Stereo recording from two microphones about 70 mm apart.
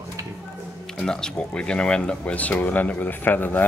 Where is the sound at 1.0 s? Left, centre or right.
Centre.